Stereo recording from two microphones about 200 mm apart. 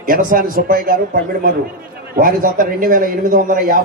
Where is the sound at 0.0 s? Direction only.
45° right (ahead or behind).